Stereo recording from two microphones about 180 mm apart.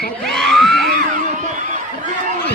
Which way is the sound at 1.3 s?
40° right (ahead or behind).